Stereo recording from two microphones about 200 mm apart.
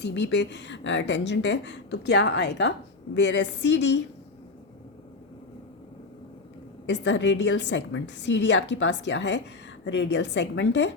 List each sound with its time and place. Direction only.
0.0 s a woman's voice: 60° left (ahead or behind)
6.8 s a woman's voice: 60° left (ahead or behind)